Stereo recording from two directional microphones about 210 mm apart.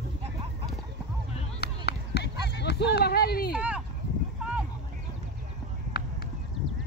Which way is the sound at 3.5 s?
5° right (ahead or behind).